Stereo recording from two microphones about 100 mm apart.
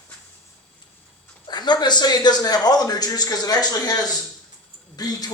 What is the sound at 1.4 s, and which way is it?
A man's voice, 45° left (ahead or behind).